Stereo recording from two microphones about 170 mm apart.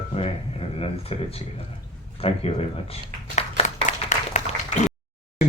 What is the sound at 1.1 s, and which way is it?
Speech, 35° left (ahead or behind).